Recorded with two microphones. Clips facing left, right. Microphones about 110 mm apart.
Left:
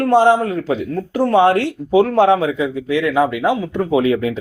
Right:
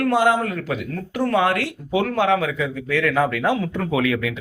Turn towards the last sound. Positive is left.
turn(degrees=30)  # may be behind; listen again after turning